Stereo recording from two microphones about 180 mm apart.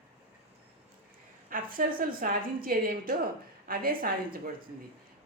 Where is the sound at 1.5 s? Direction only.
50° right (ahead or behind).